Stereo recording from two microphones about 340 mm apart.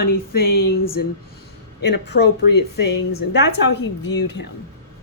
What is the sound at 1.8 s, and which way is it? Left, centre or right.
Speech, left.